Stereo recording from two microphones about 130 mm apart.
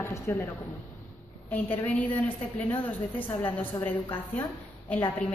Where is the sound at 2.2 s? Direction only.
15° left (ahead or behind).